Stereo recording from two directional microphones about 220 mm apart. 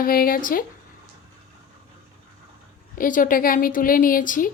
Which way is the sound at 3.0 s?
40° left (ahead or behind).